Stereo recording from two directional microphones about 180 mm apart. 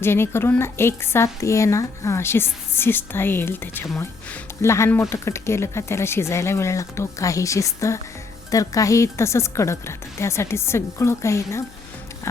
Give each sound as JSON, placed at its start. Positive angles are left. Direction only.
{"t": 0.0, "sound": "speech", "side_deg": 15}